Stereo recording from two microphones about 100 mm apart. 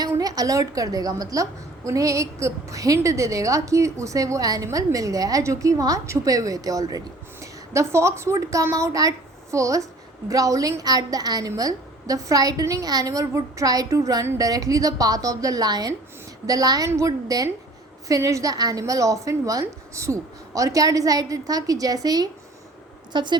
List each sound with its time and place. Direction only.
0.2 s a woman's voice: 40° right (ahead or behind)